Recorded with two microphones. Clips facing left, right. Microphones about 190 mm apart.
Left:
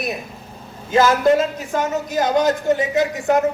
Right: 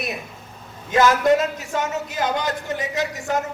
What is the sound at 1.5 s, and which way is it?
Speech, 35° left (ahead or behind).